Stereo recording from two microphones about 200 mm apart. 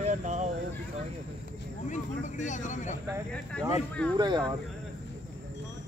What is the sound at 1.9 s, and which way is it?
Speech, 40° left (ahead or behind).